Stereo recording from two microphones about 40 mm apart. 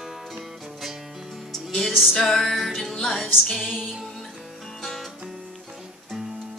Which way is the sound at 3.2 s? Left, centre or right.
Centre.